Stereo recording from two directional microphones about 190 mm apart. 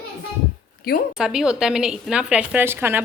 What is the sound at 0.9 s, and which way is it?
Speech, 55° left (ahead or behind).